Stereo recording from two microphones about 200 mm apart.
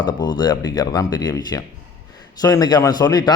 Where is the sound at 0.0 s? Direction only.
20° left (ahead or behind).